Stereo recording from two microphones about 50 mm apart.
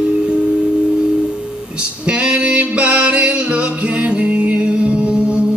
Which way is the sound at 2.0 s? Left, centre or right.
Right.